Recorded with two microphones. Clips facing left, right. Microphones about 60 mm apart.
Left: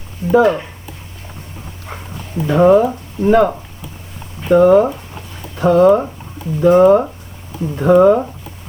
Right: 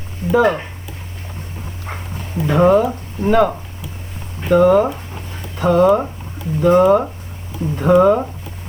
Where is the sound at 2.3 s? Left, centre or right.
Right.